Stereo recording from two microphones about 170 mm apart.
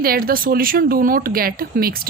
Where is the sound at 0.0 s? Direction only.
60° right (ahead or behind).